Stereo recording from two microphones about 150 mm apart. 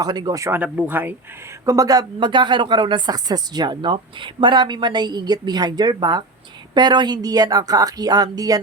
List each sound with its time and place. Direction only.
0.0 s speech: 25° right (ahead or behind)
1.6 s speech: 25° right (ahead or behind)